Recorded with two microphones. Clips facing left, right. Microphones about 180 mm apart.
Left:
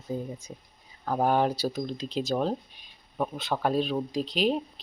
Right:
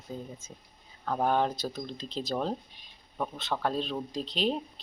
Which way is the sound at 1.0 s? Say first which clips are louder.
Left 3 dB; 10° left (ahead or behind).